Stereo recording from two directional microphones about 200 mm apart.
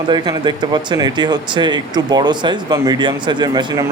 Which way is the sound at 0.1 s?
20° right (ahead or behind).